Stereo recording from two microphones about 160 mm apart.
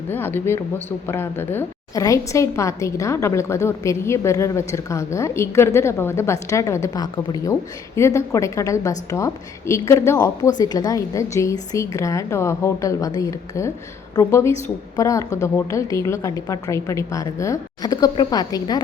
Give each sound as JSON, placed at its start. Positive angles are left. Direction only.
{"t": 0.1, "sound": "a woman's voice", "side_deg": 10}